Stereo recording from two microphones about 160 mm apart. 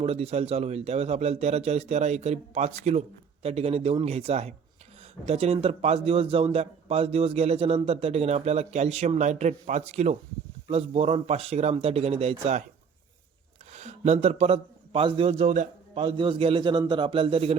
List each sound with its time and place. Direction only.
0.0 s a man's voice: 40° right (ahead or behind)
13.7 s a man's voice: 45° right (ahead or behind)
16.0 s a man's voice: 30° right (ahead or behind)